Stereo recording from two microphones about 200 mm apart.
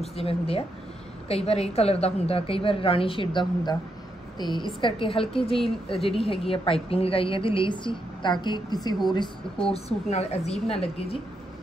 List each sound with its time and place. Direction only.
0.0 s a woman's voice: 30° left (ahead or behind)
9.7 s a woman's voice: 30° left (ahead or behind)